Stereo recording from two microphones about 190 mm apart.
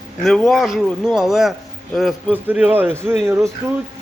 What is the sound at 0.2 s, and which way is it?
A man's voice, centre (ahead or behind).